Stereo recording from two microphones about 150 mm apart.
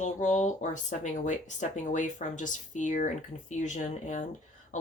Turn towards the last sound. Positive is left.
turn(degrees=55)  # may be behind; listen again after turning